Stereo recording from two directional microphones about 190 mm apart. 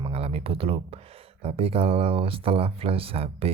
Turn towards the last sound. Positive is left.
turn(degrees=-30)  # may be behind; listen again after turning